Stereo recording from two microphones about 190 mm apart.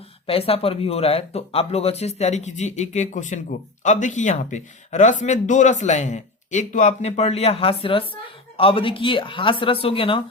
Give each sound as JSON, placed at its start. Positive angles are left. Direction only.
{"t": 0.3, "sound": "speech", "side_deg": 30}